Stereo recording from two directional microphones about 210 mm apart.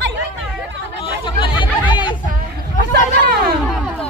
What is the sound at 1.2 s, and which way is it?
Chatter, 25° left (ahead or behind).